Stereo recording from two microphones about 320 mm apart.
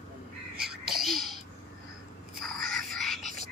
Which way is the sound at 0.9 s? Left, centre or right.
Centre.